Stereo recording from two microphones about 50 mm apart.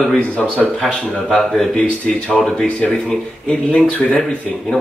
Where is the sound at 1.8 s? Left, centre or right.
Left.